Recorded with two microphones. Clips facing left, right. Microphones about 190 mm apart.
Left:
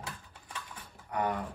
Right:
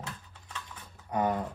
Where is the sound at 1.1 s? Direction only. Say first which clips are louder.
Right 3 dB; 25° right (ahead or behind).